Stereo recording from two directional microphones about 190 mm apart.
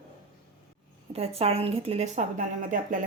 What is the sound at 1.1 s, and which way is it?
Speech, 30° right (ahead or behind).